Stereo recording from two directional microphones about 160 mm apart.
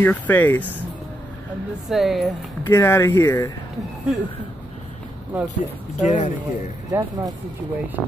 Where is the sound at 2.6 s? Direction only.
15° left (ahead or behind).